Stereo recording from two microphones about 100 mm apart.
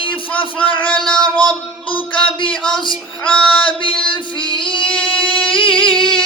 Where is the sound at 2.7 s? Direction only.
55° left (ahead or behind).